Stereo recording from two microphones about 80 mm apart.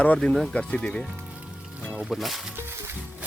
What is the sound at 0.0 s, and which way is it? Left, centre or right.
Speech, centre.